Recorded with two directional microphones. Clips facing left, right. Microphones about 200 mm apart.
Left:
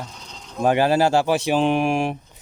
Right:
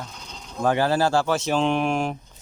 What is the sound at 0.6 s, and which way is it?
Speech, 15° left (ahead or behind).